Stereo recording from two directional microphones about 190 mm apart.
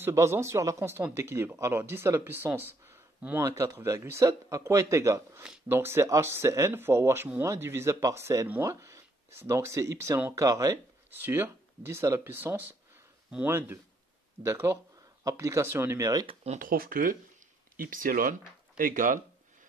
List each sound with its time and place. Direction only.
0.0 s speech: 15° right (ahead or behind)
16.5 s speech: 50° right (ahead or behind)